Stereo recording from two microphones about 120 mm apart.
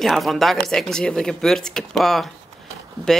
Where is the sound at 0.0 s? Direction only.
Centre (ahead or behind).